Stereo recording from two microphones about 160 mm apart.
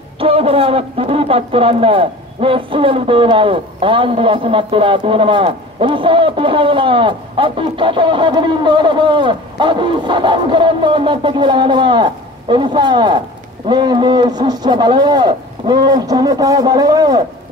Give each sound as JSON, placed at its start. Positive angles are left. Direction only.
{"t": 0.2, "sound": "a man's voice", "side_deg": -35}